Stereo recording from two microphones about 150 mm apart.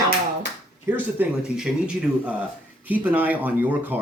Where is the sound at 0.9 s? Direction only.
10° right (ahead or behind).